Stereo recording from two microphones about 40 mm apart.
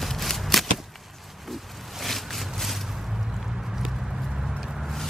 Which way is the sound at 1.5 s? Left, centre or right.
Centre.